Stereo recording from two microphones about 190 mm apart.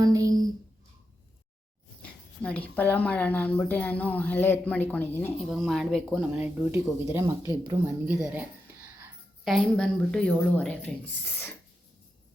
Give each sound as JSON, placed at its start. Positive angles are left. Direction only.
{"t": 0.0, "sound": "a sound", "side_deg": -20}
{"t": 2.0, "sound": "speech", "side_deg": 5}
{"t": 5.4, "sound": "speech", "side_deg": 0}